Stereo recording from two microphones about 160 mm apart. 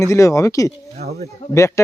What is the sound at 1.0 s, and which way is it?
Speech, 75° right (ahead or behind).